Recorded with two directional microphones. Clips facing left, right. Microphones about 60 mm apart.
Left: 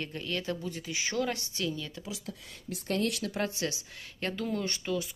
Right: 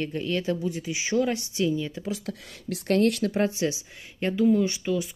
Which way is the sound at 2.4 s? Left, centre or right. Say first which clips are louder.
Right 8 dB; right.